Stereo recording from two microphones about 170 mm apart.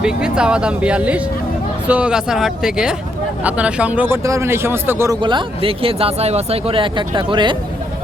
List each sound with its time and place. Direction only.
0.0 s speech: 5° right (ahead or behind)
5.2 s speech: 30° right (ahead or behind)